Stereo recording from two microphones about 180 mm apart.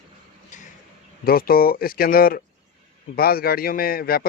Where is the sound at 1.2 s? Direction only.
55° left (ahead or behind).